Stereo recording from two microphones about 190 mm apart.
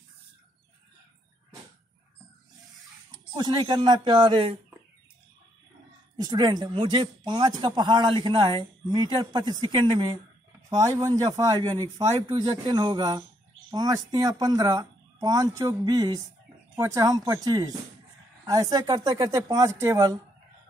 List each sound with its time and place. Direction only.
3.1 s speech: 20° right (ahead or behind)
6.1 s speech: 20° right (ahead or behind)